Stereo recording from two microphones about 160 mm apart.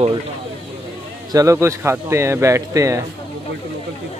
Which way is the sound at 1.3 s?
20° right (ahead or behind).